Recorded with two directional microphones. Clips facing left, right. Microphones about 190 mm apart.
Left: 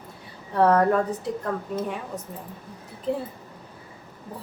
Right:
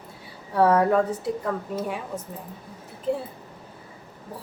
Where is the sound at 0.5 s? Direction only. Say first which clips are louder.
Even; 5° right (ahead or behind).